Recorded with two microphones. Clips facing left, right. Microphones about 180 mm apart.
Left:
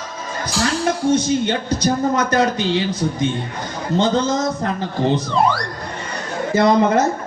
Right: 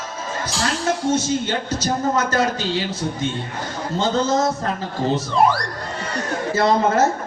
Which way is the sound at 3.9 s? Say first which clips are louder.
Left 5 dB; 20° left (ahead or behind).